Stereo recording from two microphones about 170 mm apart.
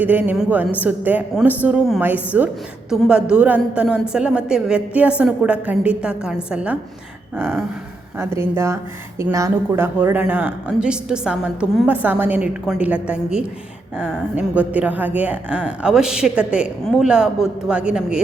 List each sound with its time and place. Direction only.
0.0 s a woman's voice: 10° right (ahead or behind)
8.2 s a woman's voice: 15° right (ahead or behind)